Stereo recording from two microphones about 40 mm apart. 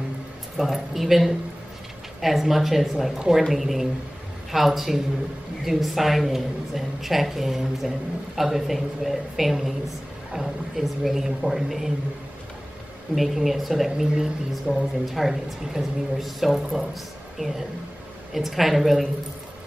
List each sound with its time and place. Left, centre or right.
0.6 s a woman's voice: centre
13.1 s speech: centre
13.9 s a woman's voice: centre
14.5 s speech: centre
18.3 s speech: centre